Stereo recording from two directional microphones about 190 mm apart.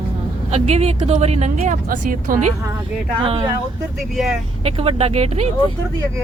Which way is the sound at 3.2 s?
30° right (ahead or behind).